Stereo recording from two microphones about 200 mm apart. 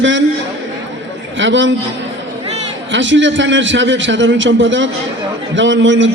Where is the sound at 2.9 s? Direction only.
65° right (ahead or behind).